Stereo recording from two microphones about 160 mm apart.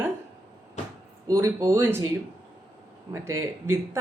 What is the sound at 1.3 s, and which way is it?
Speech, 20° right (ahead or behind).